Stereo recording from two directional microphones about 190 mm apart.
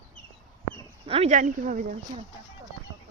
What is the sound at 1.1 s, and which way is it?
Speech, 35° right (ahead or behind).